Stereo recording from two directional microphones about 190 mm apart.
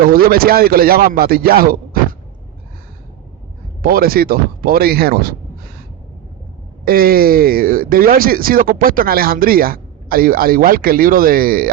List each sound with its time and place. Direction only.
0.0 s speech: 50° right (ahead or behind)
3.8 s speech: 50° right (ahead or behind)
6.8 s speech: 50° right (ahead or behind)